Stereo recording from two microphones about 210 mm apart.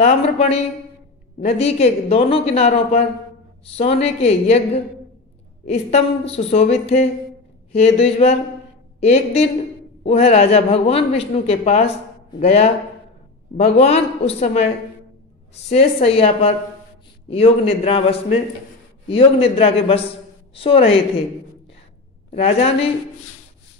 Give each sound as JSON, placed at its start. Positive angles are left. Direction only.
{"t": 0.0, "sound": "a man's voice", "side_deg": 30}
{"t": 22.3, "sound": "a man's voice", "side_deg": 30}